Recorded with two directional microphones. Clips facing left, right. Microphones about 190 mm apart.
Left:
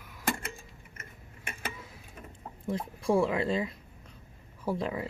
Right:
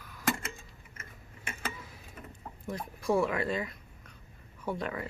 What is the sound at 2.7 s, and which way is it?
Speech, 25° left (ahead or behind).